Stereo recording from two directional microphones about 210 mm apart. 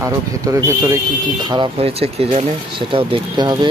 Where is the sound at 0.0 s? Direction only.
15° right (ahead or behind).